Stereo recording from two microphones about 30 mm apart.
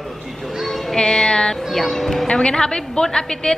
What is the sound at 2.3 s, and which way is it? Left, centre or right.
Speech, left.